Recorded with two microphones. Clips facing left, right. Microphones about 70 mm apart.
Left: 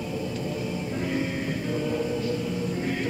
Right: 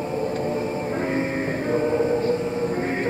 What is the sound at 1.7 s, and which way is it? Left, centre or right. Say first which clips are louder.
Music: right 8 dB; right.